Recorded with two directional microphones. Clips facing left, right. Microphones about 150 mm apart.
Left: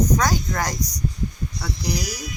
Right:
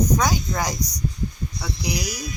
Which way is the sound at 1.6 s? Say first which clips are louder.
Left 1 dB; 10° right (ahead or behind).